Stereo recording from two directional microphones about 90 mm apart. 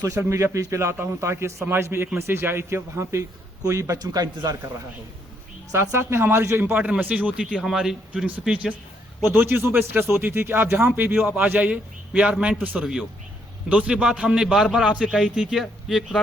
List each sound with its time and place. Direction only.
0.0 s a man's voice: 35° right (ahead or behind)
4.0 s a man's voice: 45° right (ahead or behind)
5.7 s a man's voice: 30° right (ahead or behind); by 7.4 s 15° right (ahead or behind)
7.5 s speech: 5° right (ahead or behind)
9.2 s a man's voice: 25° right (ahead or behind)
12.8 s a man's voice: 5° right (ahead or behind)